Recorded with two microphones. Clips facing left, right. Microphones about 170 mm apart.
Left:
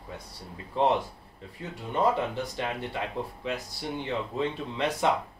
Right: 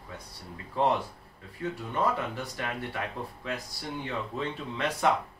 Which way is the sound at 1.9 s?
20° left (ahead or behind).